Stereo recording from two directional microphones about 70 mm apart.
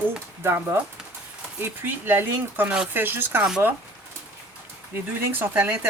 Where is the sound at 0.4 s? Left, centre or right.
Right.